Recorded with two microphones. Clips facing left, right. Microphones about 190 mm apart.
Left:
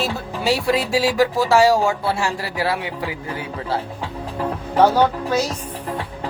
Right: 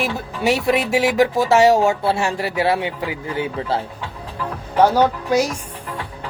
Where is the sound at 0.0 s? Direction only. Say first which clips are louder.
Right 2 dB; 20° right (ahead or behind).